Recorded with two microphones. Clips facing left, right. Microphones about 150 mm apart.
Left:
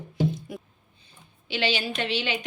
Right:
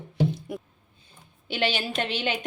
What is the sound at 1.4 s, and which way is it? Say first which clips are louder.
A woman's voice: even; 50° right (ahead or behind).